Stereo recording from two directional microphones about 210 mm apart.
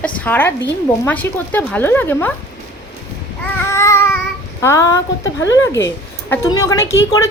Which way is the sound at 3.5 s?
15° left (ahead or behind).